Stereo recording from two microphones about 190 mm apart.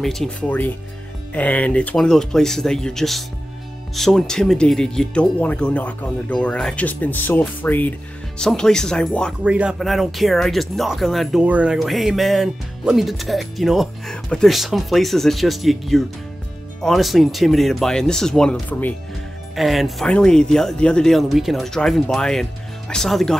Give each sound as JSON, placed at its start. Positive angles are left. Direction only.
{"t": 0.0, "sound": "speech", "side_deg": 0}